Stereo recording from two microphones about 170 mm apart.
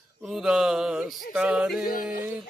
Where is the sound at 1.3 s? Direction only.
5° right (ahead or behind).